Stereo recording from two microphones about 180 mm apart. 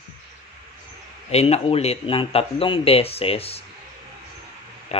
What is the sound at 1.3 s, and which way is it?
Speech, 35° left (ahead or behind).